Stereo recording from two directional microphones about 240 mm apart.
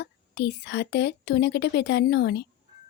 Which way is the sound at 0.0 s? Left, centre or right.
Left.